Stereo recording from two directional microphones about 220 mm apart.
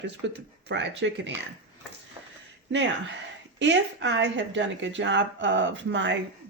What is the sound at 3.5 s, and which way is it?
A woman's voice, 55° right (ahead or behind).